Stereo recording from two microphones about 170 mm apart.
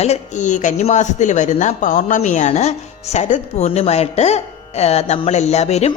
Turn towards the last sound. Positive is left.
turn(degrees=40)  # may be behind; listen again after turning